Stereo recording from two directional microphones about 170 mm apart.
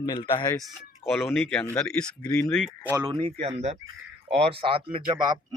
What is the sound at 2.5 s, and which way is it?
Speech, centre (ahead or behind).